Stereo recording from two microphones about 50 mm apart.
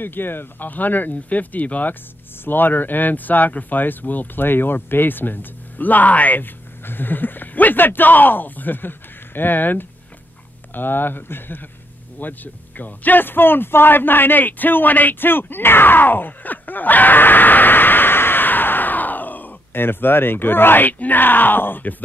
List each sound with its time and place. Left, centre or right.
0.0 s a man's voice: left